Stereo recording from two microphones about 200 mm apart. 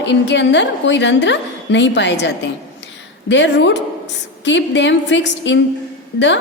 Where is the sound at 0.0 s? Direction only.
65° left (ahead or behind).